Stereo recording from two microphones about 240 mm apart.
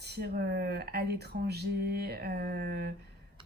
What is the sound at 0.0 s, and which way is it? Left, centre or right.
Speech, right.